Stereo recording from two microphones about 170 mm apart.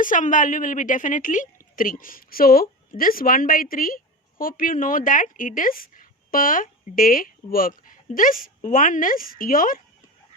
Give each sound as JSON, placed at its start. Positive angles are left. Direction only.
{"t": 0.0, "sound": "a woman's voice", "side_deg": 50}